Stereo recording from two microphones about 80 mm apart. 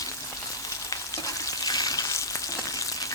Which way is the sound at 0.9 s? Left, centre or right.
Left.